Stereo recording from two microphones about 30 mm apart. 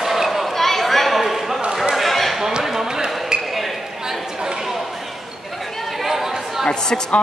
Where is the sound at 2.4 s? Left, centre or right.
Centre.